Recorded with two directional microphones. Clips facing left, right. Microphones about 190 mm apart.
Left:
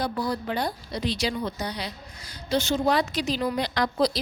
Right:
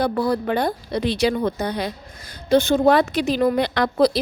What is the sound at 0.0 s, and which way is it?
A woman's voice, 60° right (ahead or behind).